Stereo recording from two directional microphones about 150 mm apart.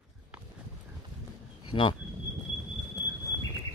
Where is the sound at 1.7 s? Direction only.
35° left (ahead or behind).